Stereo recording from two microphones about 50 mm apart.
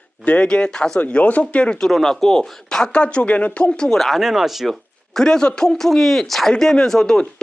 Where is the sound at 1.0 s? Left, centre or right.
Left.